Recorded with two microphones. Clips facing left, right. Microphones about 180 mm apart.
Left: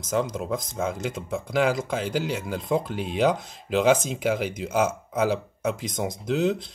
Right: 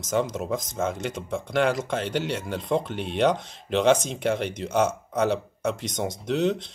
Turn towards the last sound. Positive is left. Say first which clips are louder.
# even
turn(degrees=0)  # may be behind; listen again after turning